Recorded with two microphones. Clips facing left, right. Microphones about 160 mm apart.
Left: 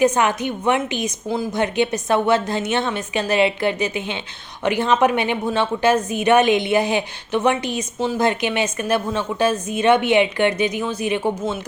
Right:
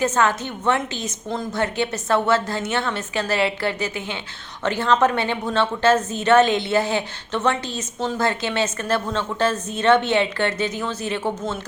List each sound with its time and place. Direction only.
0.0 s a woman's voice: 15° left (ahead or behind)